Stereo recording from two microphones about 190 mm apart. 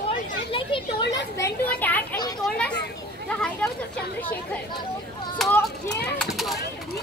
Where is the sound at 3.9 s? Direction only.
10° left (ahead or behind).